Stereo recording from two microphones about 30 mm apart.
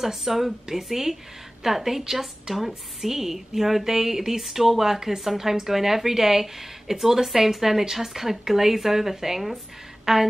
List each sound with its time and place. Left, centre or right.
0.0 s a woman's voice: centre